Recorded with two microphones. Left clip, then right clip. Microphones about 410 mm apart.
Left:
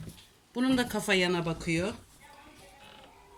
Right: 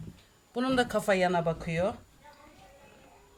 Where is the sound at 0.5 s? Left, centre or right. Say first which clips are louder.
Right 2 dB; right.